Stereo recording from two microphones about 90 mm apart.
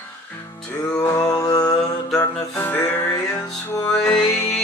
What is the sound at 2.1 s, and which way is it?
Music, 25° left (ahead or behind).